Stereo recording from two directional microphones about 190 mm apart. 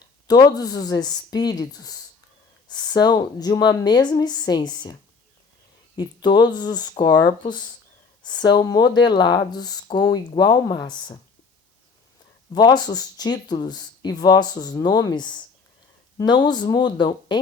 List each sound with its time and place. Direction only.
0.3 s speech: 20° left (ahead or behind)
6.2 s speech: 25° left (ahead or behind)
12.5 s speech: 20° left (ahead or behind)